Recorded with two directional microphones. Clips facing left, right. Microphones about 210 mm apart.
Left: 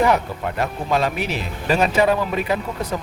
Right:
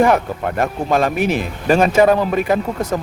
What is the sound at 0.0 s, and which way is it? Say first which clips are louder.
Speech: right 4 dB; 50° right (ahead or behind).